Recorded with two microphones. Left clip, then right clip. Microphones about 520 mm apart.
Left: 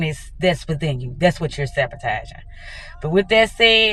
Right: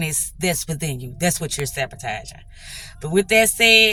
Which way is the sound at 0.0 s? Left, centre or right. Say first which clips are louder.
Left 4 dB; right.